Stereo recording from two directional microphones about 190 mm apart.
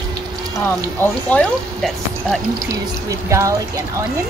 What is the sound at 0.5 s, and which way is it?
Speech, 10° left (ahead or behind).